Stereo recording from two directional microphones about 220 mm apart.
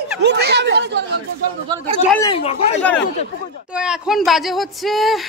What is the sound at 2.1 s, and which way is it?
Speech, 20° left (ahead or behind).